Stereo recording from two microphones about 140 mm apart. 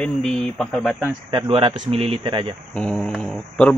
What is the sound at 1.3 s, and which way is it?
Speech, 35° right (ahead or behind).